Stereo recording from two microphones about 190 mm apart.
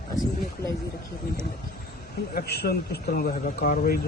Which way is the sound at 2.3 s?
55° left (ahead or behind).